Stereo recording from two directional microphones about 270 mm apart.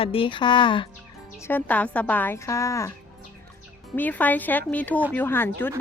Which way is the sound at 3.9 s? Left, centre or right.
Centre.